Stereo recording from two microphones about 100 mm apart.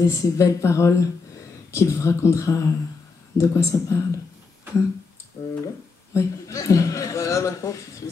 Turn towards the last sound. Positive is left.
turn(degrees=30)  # may be behind; listen again after turning